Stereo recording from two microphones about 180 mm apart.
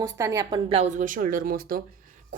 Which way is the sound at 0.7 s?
40° right (ahead or behind).